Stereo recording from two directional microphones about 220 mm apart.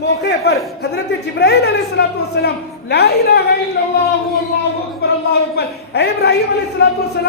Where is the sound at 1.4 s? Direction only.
50° left (ahead or behind).